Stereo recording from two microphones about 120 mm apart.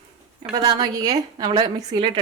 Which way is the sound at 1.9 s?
45° right (ahead or behind).